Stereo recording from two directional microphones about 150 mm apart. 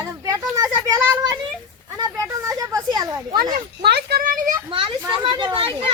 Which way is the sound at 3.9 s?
90° right.